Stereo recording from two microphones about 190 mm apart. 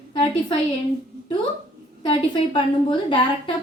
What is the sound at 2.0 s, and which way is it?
A woman's voice, 25° left (ahead or behind).